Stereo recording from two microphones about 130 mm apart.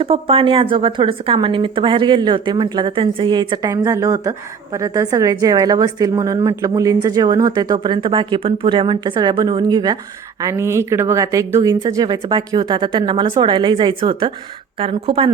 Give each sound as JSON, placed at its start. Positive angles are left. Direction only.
{"t": 0.0, "sound": "a woman's voice", "side_deg": -45}